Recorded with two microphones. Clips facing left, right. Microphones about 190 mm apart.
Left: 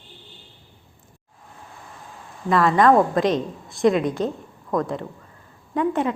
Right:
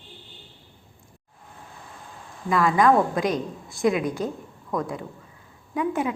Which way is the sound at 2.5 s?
5° right (ahead or behind).